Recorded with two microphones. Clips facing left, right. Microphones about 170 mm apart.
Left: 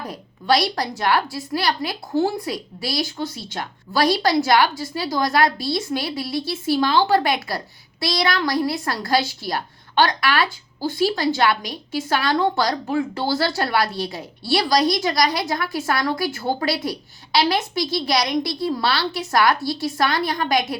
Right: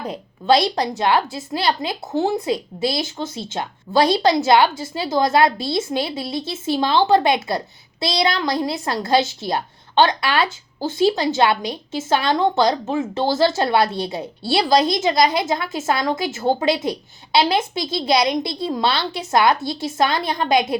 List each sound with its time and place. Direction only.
0.0 s a woman's voice: 25° right (ahead or behind)